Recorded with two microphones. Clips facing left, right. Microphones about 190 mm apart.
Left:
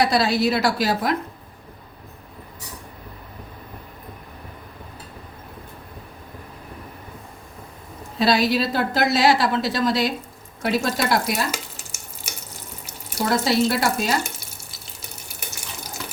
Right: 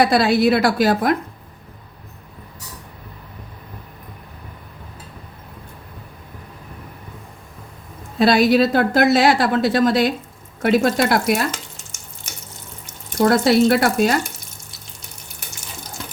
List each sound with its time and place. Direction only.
0.0 s a woman's voice: 55° right (ahead or behind)
8.2 s a woman's voice: 50° right (ahead or behind)
11.5 s frying: 10° left (ahead or behind)
13.2 s a woman's voice: 55° right (ahead or behind)